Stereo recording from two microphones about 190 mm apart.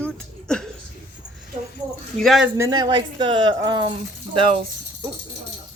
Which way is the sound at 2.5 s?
15° right (ahead or behind).